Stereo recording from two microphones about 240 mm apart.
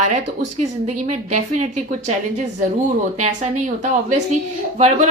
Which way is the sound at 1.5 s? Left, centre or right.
Right.